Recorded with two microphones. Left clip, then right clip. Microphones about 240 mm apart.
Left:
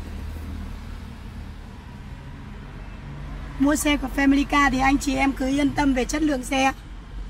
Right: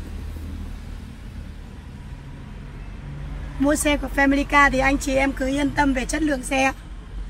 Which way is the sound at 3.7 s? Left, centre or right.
Centre.